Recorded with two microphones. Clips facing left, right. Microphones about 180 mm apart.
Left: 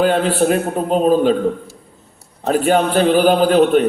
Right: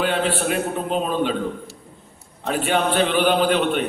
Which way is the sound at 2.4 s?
40° left (ahead or behind).